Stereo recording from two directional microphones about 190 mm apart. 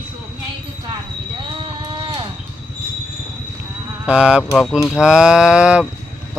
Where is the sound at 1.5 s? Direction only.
25° right (ahead or behind).